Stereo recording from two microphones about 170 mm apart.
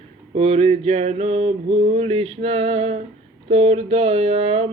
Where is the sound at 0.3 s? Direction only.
40° right (ahead or behind).